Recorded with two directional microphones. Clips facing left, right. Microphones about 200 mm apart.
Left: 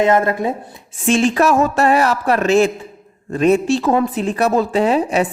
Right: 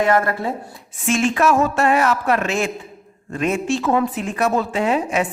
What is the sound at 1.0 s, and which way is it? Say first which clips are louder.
A woman's voice: left 3 dB; 30° left (ahead or behind).